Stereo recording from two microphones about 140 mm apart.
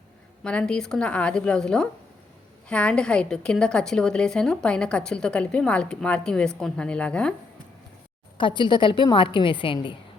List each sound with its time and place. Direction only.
0.4 s a woman's voice: 5° left (ahead or behind)
8.4 s a woman's voice: 35° left (ahead or behind)